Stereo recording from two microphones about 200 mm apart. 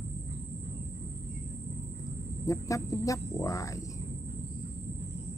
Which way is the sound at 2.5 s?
15° left (ahead or behind).